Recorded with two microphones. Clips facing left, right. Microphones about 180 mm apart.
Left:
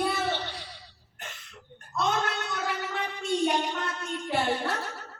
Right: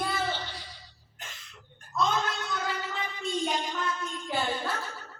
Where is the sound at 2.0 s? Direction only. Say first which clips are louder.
Even; 65° left (ahead or behind).